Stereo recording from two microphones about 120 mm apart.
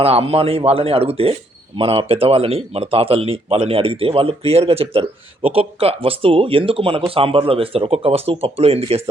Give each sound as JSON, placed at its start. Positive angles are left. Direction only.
{"t": 0.0, "sound": "speech", "side_deg": -55}